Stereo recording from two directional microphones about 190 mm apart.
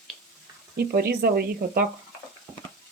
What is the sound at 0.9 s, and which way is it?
Speech, 55° right (ahead or behind).